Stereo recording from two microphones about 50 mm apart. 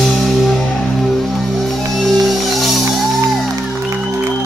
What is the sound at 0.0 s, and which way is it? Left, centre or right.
Music, centre.